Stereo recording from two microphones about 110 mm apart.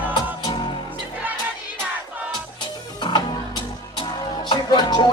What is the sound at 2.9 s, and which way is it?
Music, 40° left (ahead or behind).